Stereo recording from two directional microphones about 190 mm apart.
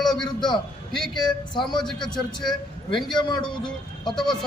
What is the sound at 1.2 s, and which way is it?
A man's voice, 25° left (ahead or behind).